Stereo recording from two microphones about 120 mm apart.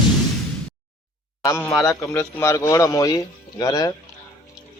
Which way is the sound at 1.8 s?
20° left (ahead or behind).